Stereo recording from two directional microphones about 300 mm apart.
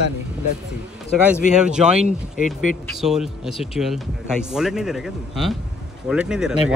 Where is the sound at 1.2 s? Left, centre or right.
Centre.